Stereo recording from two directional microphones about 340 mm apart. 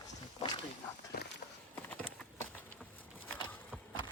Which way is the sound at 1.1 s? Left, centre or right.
Left.